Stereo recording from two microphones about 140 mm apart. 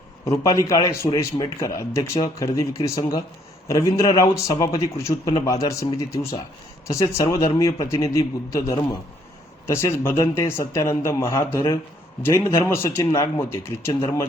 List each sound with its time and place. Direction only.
0.3 s a man's voice: 25° left (ahead or behind)